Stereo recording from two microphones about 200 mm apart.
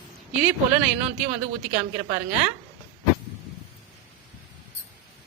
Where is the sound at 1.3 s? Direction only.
35° right (ahead or behind).